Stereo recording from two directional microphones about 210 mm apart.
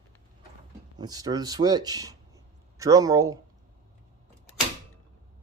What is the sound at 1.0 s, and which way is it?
Speech, 20° right (ahead or behind).